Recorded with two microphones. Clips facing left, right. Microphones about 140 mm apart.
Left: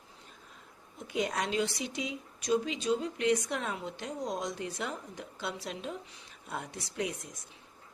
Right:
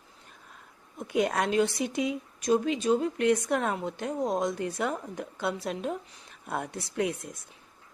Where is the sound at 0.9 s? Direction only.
55° right (ahead or behind).